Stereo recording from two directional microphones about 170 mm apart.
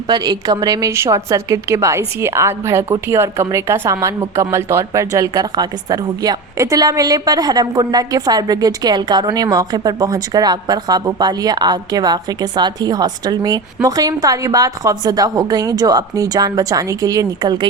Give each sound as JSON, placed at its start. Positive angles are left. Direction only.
{"t": 0.1, "sound": "a woman's voice", "side_deg": -25}